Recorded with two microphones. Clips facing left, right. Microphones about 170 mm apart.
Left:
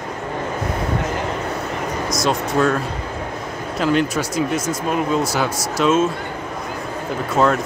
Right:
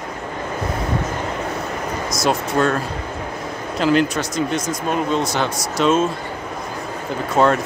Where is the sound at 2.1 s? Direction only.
5° right (ahead or behind).